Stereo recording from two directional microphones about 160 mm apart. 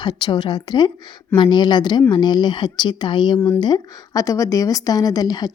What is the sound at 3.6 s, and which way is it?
A woman's voice, 25° left (ahead or behind).